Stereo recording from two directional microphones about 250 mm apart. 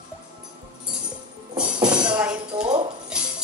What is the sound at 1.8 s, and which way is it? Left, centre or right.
Tambourine, centre.